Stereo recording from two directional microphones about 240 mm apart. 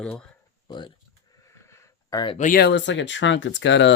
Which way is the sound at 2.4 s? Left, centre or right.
Left.